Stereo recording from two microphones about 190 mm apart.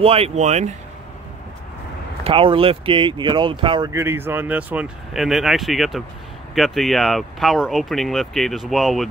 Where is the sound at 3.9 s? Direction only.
15° right (ahead or behind).